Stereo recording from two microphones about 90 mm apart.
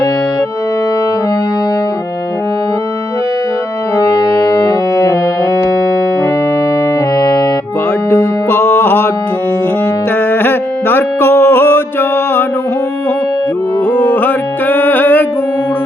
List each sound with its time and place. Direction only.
3.9 s music: 45° left (ahead or behind)
7.2 s music: 45° left (ahead or behind)
8.1 s music: 25° left (ahead or behind)
10.2 s music: 20° left (ahead or behind)
13.8 s music: 20° left (ahead or behind)